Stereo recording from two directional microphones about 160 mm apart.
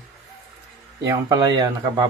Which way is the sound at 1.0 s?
20° right (ahead or behind).